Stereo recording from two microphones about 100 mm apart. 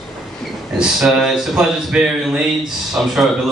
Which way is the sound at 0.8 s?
5° right (ahead or behind).